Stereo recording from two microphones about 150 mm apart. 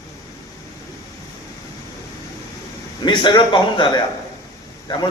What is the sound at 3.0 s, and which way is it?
A man's voice, 30° left (ahead or behind).